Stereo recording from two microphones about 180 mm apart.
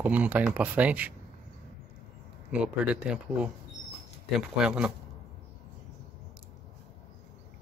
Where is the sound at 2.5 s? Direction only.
5° right (ahead or behind).